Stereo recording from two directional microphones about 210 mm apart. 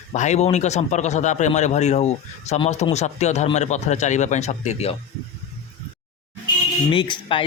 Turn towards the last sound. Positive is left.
turn(degrees=25)  # may be behind; listen again after turning